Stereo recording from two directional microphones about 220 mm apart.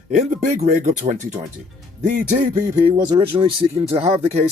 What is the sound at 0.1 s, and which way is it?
Speech, 35° right (ahead or behind).